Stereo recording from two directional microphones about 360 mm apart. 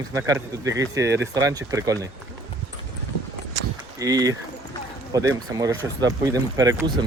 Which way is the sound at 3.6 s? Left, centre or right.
Right.